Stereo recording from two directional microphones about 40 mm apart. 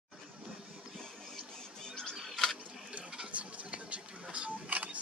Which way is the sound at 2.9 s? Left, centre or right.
Right.